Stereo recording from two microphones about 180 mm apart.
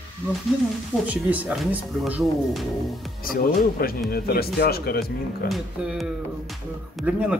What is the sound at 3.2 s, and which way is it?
Speech, 55° left (ahead or behind).